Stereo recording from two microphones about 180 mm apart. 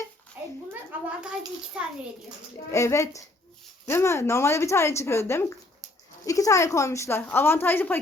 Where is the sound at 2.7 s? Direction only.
15° left (ahead or behind).